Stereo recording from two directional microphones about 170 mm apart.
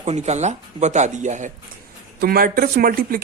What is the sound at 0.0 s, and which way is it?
Speech, 40° right (ahead or behind).